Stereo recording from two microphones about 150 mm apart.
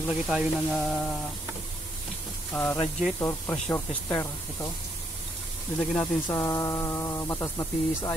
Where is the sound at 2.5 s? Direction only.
10° left (ahead or behind).